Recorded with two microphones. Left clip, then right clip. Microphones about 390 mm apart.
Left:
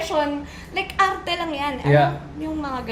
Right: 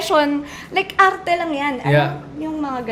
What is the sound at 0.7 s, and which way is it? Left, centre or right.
A woman's voice, right.